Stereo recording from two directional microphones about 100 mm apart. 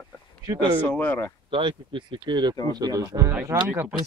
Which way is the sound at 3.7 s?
15° right (ahead or behind).